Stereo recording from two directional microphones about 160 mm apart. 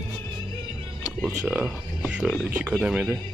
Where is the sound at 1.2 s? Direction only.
10° right (ahead or behind).